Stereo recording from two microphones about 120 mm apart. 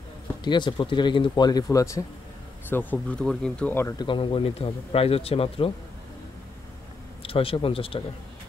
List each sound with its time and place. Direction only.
0.4 s speech: 40° left (ahead or behind)
2.7 s speech: 15° left (ahead or behind)
4.0 s speech: 45° left (ahead or behind)
7.2 s speech: 50° left (ahead or behind)